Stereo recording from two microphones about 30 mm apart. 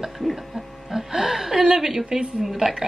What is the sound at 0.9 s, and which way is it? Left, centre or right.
Music, centre.